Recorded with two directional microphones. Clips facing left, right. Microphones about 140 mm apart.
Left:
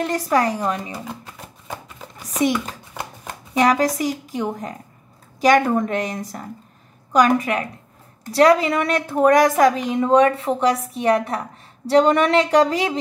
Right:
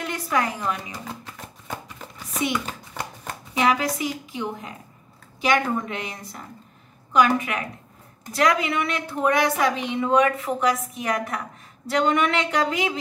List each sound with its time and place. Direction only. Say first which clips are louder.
0.0 s a woman's voice: left 6 dB; 35° left (ahead or behind)
3.5 s a woman's voice: left 5 dB; 45° left (ahead or behind)